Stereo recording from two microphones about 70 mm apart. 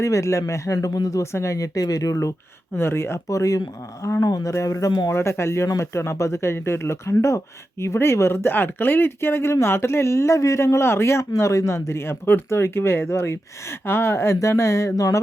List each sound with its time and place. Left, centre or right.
0.0 s speech: left
1.2 s speech: left
2.7 s speech: left
4.2 s speech: left
4.5 s speech: left
5.0 s speech: left